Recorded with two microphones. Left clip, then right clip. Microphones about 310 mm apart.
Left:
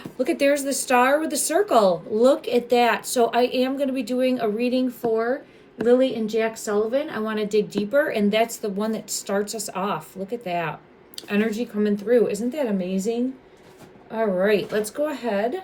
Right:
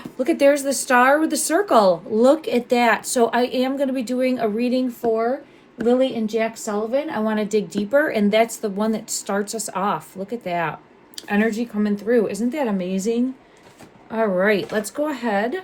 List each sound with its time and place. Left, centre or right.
0.2 s speech: right